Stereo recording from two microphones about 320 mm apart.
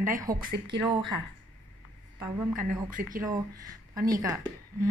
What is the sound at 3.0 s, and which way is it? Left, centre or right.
Speech, right.